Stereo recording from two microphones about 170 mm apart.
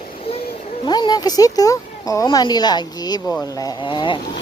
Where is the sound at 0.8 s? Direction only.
25° left (ahead or behind).